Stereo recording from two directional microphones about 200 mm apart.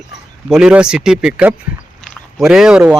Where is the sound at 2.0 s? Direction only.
Centre (ahead or behind).